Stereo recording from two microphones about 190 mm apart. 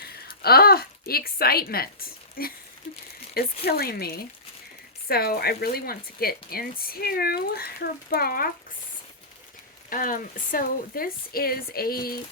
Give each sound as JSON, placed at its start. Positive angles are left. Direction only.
{"t": 0.0, "sound": "speech", "side_deg": 55}
{"t": 9.9, "sound": "speech", "side_deg": 45}